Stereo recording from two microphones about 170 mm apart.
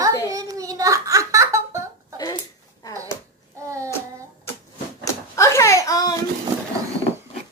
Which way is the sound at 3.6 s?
15° right (ahead or behind).